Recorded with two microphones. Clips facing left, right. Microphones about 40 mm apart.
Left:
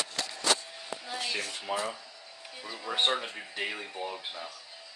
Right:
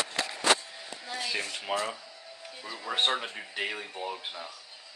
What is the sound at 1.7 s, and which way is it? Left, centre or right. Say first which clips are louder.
Speech: right 2 dB; right.